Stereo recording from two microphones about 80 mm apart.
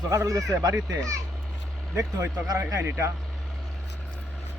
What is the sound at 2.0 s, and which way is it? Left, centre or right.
Speech, right.